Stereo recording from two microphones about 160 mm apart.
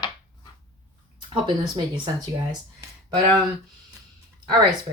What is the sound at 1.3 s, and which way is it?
Speech, 30° right (ahead or behind).